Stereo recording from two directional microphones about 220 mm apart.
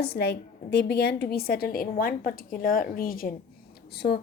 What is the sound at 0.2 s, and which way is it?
A woman's voice, 50° left (ahead or behind).